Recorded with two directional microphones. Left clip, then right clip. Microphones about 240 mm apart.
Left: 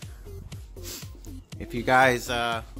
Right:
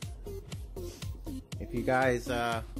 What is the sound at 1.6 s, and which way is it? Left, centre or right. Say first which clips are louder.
Speech: left 8 dB; centre.